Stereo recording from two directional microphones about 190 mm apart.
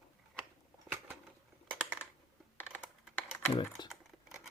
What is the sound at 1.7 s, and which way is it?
Typing, 10° right (ahead or behind).